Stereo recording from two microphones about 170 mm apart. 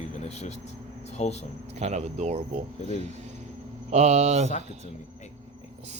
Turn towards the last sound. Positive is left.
turn(degrees=-40)  # may be behind; listen again after turning